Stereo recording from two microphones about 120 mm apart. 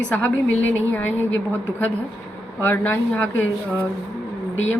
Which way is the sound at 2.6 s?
20° left (ahead or behind).